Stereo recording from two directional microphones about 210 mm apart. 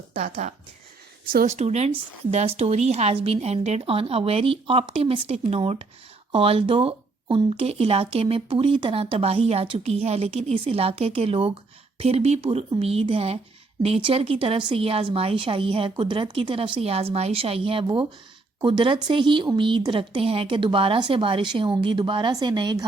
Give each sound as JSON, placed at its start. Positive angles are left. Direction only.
{"t": 0.1, "sound": "speech", "side_deg": -35}